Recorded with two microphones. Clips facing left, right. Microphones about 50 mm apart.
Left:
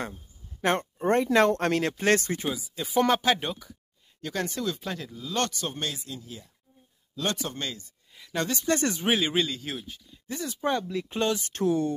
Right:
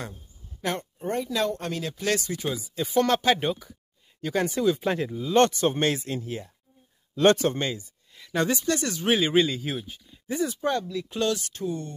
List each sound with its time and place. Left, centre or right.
0.6 s speech: left
2.0 s speech: left
2.5 s speech: centre
3.3 s speech: centre; by 7.5 s right
7.5 s speech: right
8.1 s speech: centre
8.7 s speech: left
9.0 s speech: centre
10.8 s speech: left